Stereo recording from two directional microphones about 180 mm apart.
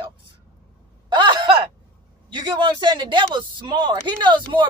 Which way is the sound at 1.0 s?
25° right (ahead or behind).